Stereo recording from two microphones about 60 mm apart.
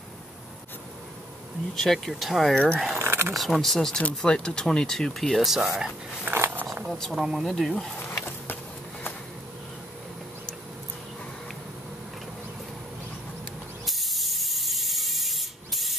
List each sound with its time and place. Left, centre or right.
1.8 s speech: centre
2.5 s speech: centre
3.0 s speech: right
3.3 s speech: centre
4.0 s speech: centre
5.4 s speech: centre
6.3 s a sound: right
6.9 s speech: centre
7.2 s speech: centre
13.8 s a sound: centre